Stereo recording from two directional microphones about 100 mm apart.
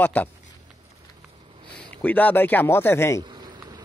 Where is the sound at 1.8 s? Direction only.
15° left (ahead or behind).